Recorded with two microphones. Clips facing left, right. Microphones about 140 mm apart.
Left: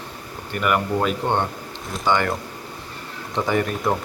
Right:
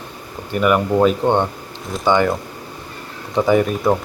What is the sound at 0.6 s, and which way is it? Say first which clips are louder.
Speech: right 7 dB; 15° right (ahead or behind).